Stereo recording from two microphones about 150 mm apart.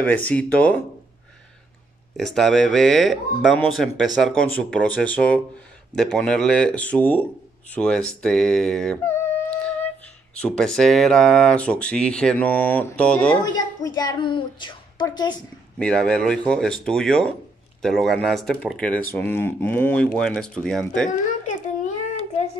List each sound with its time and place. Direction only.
0.0 s speech: 10° left (ahead or behind)
2.1 s speech: centre (ahead or behind)
9.0 s humming: 10° left (ahead or behind)
10.3 s speech: 5° left (ahead or behind)
13.4 s a woman's voice: 25° left (ahead or behind)
15.8 s speech: 5° left (ahead or behind)